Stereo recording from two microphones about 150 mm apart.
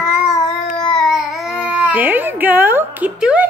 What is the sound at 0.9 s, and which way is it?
Baby cry, centre (ahead or behind).